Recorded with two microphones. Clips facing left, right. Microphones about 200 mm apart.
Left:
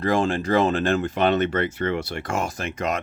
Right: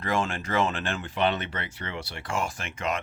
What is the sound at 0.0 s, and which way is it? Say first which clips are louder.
Speech: left 7 dB; 35° left (ahead or behind).